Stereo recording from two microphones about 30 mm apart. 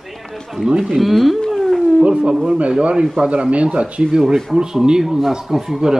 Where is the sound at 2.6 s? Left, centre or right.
Right.